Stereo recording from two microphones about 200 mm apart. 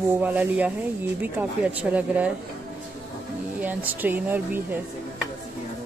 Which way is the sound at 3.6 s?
10° right (ahead or behind).